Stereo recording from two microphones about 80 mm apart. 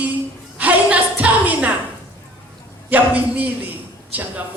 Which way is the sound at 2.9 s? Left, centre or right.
Right.